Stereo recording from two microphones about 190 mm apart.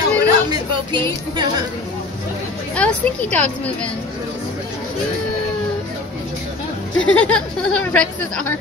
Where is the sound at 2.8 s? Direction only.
5° left (ahead or behind).